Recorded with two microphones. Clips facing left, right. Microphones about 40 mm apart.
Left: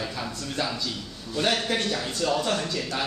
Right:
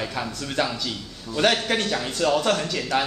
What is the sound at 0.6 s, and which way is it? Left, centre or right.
A man's voice, right.